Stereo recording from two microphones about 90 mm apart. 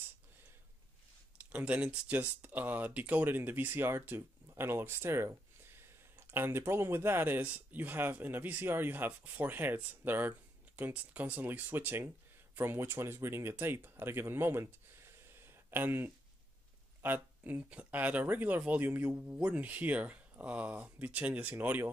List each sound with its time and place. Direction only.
1.5 s speech: 15° right (ahead or behind)
15.2 s a sound: 25° right (ahead or behind)
17.0 s speech: 20° right (ahead or behind)